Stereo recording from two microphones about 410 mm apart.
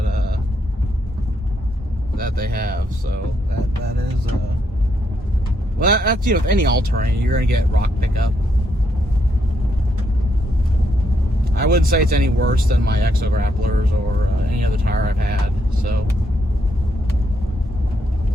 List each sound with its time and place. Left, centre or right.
2.1 s speech: right
5.8 s speech: right
11.6 s speech: right